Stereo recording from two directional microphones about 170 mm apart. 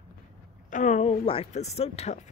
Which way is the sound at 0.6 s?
45° left (ahead or behind).